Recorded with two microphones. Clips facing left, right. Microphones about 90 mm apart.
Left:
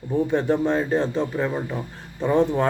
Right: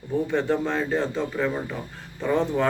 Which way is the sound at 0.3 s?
20° left (ahead or behind).